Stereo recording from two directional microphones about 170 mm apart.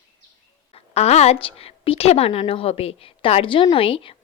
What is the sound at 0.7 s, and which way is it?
A woman's voice, 40° left (ahead or behind).